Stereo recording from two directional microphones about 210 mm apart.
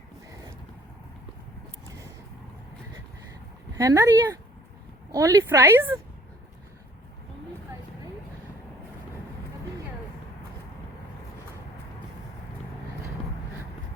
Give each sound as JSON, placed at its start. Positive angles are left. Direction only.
{"t": 3.8, "sound": "a woman's voice", "side_deg": -15}